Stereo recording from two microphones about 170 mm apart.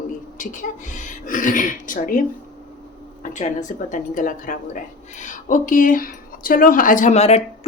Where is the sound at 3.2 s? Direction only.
45° left (ahead or behind).